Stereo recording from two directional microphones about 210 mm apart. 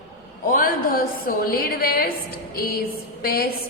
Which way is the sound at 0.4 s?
40° left (ahead or behind).